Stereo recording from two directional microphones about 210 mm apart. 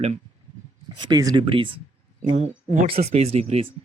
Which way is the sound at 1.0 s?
20° right (ahead or behind).